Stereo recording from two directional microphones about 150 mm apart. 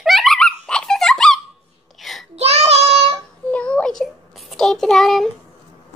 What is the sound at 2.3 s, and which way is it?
Child singing, 45° right (ahead or behind).